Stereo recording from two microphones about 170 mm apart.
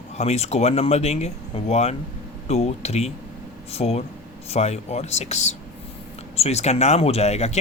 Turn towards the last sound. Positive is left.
turn(degrees=40)  # may be behind; listen again after turning